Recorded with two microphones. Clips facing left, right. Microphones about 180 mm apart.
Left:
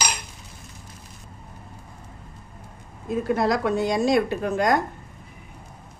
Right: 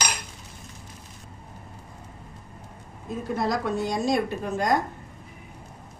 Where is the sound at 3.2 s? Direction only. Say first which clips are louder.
Left 4 dB; 75° left (ahead or behind).